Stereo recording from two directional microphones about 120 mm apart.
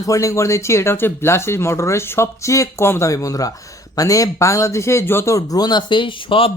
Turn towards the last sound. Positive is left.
turn(degrees=50)  # may be behind; listen again after turning